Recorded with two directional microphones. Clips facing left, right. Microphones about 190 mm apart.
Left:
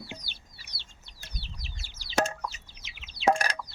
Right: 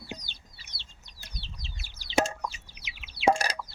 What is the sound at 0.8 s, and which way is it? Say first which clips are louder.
Plop: even; 20° right (ahead or behind).